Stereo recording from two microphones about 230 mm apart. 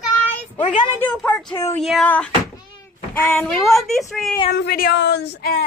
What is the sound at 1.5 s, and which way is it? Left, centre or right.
Speech, centre.